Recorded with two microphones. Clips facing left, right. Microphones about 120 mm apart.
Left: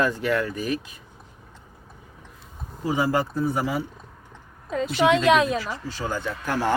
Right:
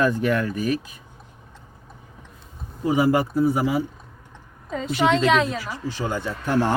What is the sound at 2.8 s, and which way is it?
Speech, 15° right (ahead or behind).